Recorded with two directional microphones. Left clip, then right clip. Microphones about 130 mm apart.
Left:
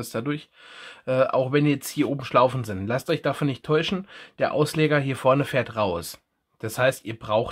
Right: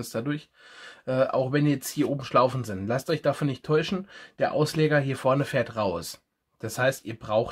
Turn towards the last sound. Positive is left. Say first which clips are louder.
# left 2 dB
turn(degrees=25)  # may be behind; listen again after turning